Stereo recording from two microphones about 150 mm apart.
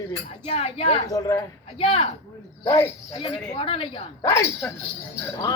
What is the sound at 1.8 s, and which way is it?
Speech, 40° left (ahead or behind).